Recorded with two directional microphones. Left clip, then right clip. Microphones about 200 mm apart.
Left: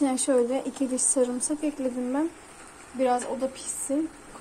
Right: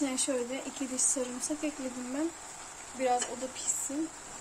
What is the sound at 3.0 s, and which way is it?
Speech, 30° left (ahead or behind).